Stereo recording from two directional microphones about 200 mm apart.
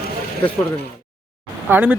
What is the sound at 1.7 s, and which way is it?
Speech, 5° right (ahead or behind).